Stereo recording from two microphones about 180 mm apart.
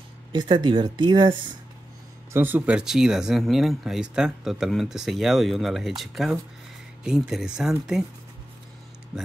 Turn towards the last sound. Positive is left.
turn(degrees=-5)  # may be behind; listen again after turning